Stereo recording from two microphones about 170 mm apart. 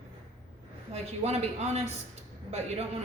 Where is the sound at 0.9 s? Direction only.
40° right (ahead or behind).